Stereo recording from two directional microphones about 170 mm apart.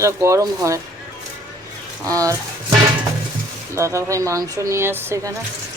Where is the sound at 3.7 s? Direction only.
15° right (ahead or behind).